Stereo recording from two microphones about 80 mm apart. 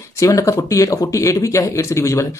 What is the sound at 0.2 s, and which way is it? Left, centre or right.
Speech, left.